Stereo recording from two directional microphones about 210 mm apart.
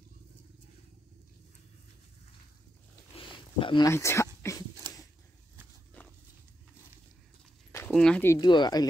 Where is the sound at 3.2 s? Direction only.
25° left (ahead or behind).